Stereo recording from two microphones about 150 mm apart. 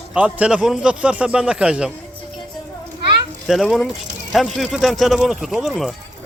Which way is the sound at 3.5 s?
Centre (ahead or behind).